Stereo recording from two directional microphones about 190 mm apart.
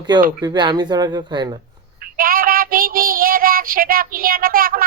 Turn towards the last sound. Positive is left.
turn(degrees=-50)  # may be behind; listen again after turning